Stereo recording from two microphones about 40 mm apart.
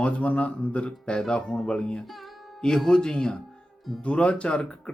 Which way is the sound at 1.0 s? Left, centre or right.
Left.